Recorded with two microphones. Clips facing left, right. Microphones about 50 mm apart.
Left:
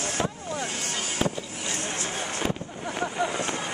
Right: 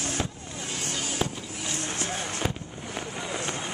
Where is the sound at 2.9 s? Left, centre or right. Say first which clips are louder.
Left 6 dB; left.